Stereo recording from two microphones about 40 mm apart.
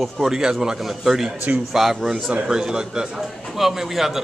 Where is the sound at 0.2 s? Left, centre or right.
Centre.